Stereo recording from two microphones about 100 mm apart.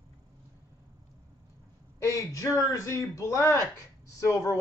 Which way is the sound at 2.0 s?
35° left (ahead or behind).